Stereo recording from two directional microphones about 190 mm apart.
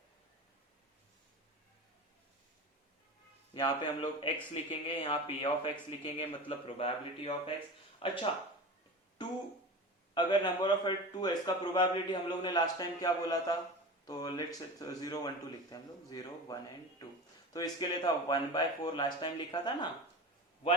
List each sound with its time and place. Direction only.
3.5 s a man's voice: 25° left (ahead or behind)
10.2 s a man's voice: 25° left (ahead or behind)